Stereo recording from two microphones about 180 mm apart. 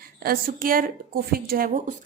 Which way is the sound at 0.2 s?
55° right (ahead or behind).